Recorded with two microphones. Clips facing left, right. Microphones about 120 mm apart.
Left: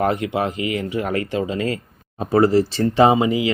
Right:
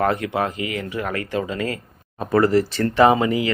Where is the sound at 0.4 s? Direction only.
25° left (ahead or behind).